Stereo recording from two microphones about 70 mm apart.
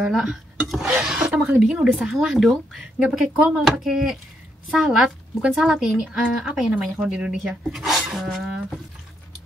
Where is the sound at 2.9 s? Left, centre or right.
Centre.